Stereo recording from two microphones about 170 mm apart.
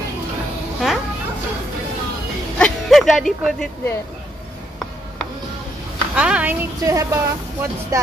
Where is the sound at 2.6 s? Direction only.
Centre (ahead or behind).